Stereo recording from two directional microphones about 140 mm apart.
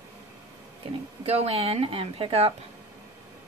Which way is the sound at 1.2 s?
45° right (ahead or behind).